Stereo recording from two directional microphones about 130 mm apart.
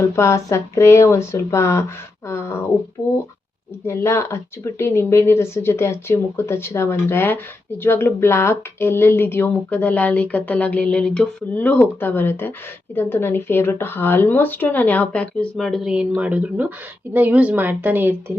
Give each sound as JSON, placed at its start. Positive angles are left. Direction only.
{"t": 0.2, "sound": "speech", "side_deg": 20}
{"t": 3.8, "sound": "a woman's voice", "side_deg": 20}